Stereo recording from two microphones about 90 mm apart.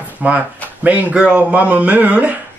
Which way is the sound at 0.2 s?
20° right (ahead or behind).